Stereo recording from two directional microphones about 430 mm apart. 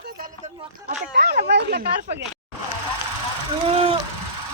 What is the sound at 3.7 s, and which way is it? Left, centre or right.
Speech, centre.